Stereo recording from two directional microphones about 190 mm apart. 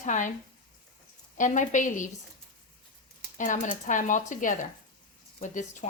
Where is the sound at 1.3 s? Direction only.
40° left (ahead or behind).